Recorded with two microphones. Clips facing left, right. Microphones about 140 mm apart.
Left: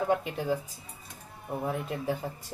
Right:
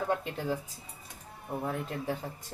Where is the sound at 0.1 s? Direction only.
10° left (ahead or behind).